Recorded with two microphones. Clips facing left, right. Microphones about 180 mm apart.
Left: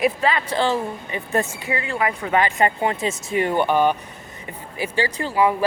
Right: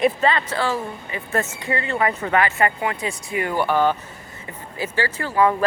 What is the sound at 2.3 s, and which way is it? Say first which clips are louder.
Speech: left 3 dB; 15° left (ahead or behind).